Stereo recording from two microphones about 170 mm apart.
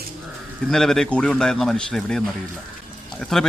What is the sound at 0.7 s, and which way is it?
Speech, 5° left (ahead or behind).